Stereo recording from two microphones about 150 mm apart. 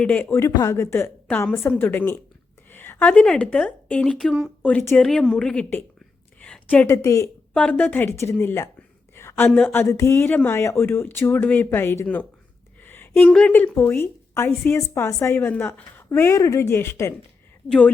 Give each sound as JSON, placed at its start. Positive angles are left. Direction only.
{"t": 0.0, "sound": "a woman's voice", "side_deg": 10}
{"t": 7.5, "sound": "a woman's voice", "side_deg": 10}
{"t": 9.1, "sound": "a sound", "side_deg": 15}
{"t": 9.5, "sound": "a woman's voice", "side_deg": 10}
{"t": 12.8, "sound": "a sound", "side_deg": 15}
{"t": 13.3, "sound": "a woman's voice", "side_deg": 10}